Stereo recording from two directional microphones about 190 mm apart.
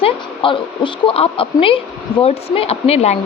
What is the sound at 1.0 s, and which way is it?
Speech, 30° left (ahead or behind).